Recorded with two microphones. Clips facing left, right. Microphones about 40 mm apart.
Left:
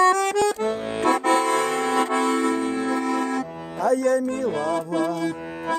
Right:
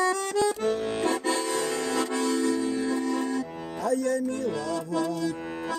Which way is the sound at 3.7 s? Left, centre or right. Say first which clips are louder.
Left 6 dB; left.